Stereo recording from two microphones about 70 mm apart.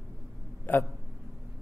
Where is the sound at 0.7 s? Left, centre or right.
Left.